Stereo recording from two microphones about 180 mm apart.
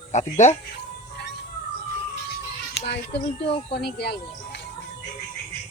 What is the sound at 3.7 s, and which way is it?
Speech, 65° left (ahead or behind).